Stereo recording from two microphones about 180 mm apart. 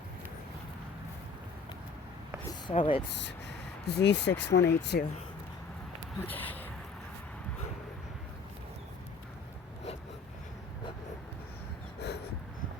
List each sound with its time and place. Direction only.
2.6 s speech: 30° left (ahead or behind)
3.1 s speech: 75° left (ahead or behind)
6.1 s speech: 10° left (ahead or behind)
11.9 s dog: 65° left (ahead or behind)